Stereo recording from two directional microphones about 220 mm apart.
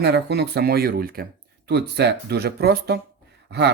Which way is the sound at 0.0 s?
50° right (ahead or behind).